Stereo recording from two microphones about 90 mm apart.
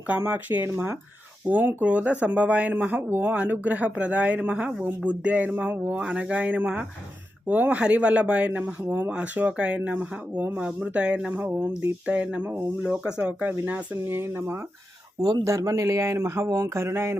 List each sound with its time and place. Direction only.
0.2 s speech: 20° right (ahead or behind)
6.0 s speech: 10° right (ahead or behind); by 14.7 s 25° right (ahead or behind)
15.2 s speech: 40° right (ahead or behind)